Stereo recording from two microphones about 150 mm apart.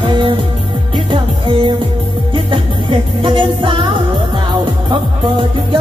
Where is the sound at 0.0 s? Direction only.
35° right (ahead or behind).